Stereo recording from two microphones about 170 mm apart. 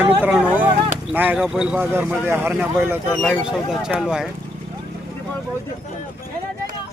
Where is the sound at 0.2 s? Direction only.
5° right (ahead or behind).